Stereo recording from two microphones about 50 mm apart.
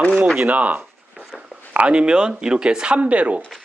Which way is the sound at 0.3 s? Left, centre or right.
Right.